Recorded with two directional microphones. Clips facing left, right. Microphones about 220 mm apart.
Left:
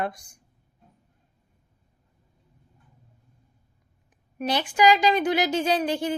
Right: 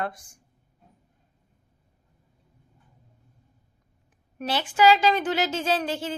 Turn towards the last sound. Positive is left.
turn(degrees=15)  # may be behind; listen again after turning